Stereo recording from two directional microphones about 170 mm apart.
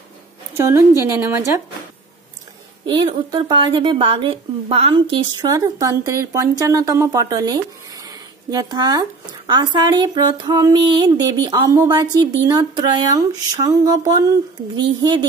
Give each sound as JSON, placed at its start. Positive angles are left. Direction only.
{"t": 0.6, "sound": "a woman's voice", "side_deg": -15}
{"t": 3.3, "sound": "a woman's voice", "side_deg": -25}